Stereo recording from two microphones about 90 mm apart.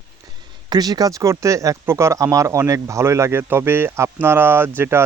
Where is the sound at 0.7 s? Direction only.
45° right (ahead or behind).